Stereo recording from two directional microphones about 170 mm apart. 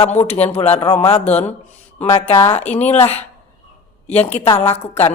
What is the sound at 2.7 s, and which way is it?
Speech, 40° left (ahead or behind).